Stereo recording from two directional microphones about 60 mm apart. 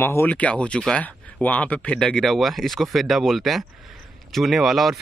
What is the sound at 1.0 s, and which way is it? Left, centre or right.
Speech, left.